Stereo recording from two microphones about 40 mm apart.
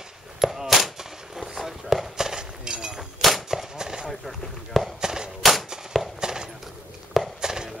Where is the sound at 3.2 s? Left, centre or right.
Centre.